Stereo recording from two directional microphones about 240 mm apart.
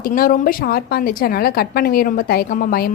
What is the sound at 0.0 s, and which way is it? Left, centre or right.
A woman's voice, left.